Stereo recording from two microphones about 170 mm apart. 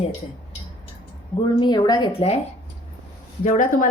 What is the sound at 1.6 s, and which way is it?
Speech, 25° left (ahead or behind).